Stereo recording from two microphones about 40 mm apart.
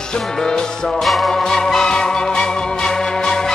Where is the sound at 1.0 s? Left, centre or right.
Centre.